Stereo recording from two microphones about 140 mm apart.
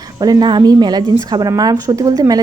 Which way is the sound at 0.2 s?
30° right (ahead or behind).